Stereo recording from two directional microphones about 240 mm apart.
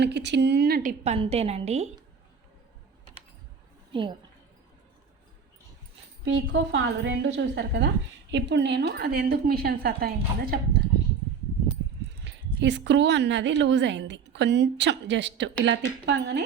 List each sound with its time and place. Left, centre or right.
0.0 s a woman's voice: right
6.2 s a woman's voice: right
12.2 s a woman's voice: right